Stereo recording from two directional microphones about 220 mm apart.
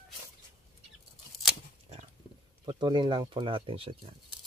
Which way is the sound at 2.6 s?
20° right (ahead or behind).